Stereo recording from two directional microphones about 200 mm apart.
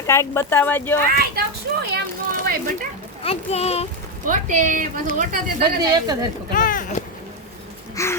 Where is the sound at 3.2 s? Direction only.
30° left (ahead or behind).